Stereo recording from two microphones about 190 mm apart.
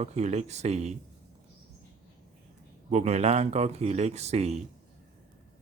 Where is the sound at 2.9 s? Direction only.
35° right (ahead or behind).